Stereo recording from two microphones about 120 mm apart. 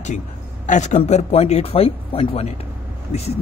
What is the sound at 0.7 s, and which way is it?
Speech, 80° left.